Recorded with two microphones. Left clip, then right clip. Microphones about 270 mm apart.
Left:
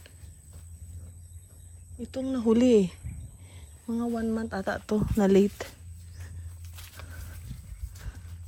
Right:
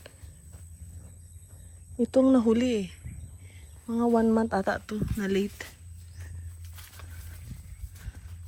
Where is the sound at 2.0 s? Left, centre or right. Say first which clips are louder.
Right 11 dB; centre.